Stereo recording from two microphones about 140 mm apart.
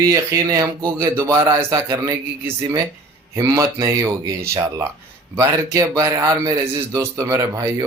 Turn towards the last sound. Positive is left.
turn(degrees=-25)  # may be behind; listen again after turning